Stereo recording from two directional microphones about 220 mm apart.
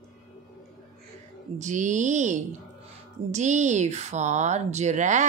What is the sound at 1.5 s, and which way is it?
Speech, 35° right (ahead or behind).